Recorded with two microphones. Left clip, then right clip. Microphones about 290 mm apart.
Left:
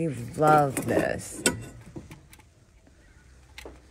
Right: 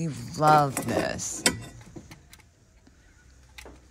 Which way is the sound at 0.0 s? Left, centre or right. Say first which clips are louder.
Even; centre.